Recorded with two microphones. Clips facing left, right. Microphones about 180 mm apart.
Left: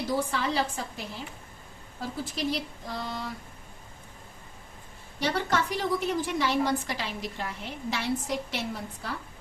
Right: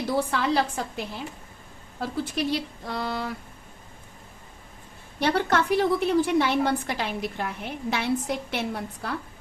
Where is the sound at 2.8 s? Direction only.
70° right (ahead or behind).